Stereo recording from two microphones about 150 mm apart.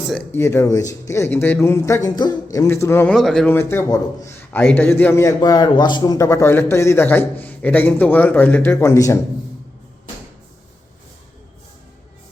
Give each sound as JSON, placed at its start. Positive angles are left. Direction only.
{"t": 0.3, "sound": "a man's voice", "side_deg": 15}
{"t": 3.1, "sound": "speech", "side_deg": 0}
{"t": 3.4, "sound": "a man's voice", "side_deg": 15}